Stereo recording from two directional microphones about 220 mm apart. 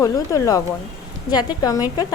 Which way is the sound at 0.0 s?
15° left (ahead or behind).